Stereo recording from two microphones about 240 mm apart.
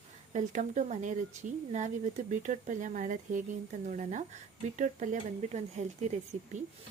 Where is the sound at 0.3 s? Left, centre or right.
Right.